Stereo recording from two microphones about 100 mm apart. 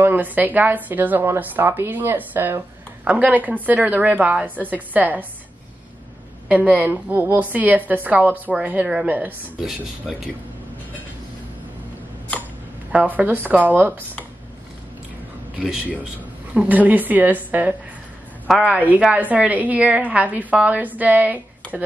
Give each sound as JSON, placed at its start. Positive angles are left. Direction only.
{"t": 0.0, "sound": "a woman's voice", "side_deg": -20}
{"t": 6.5, "sound": "a woman's voice", "side_deg": -15}
{"t": 9.7, "sound": "speech", "side_deg": -5}
{"t": 12.9, "sound": "a woman's voice", "side_deg": -15}
{"t": 15.6, "sound": "a woman's voice", "side_deg": -10}